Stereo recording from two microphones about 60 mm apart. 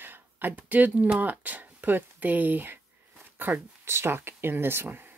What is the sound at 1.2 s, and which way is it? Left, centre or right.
Speech, right.